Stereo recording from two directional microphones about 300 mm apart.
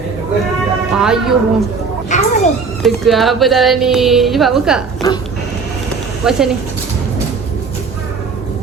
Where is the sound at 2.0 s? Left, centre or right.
Left.